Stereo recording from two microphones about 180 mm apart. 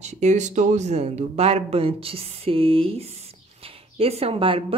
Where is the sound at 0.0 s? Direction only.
40° right (ahead or behind).